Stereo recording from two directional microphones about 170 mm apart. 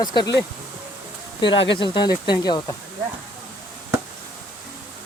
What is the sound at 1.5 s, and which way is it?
Speech, 90° left.